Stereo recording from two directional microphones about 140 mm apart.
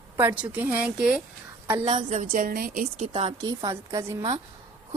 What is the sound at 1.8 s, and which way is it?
A woman's voice, 55° right (ahead or behind).